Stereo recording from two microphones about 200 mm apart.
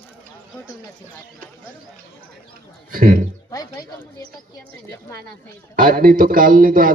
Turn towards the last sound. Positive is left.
turn(degrees=-45)  # may be behind; listen again after turning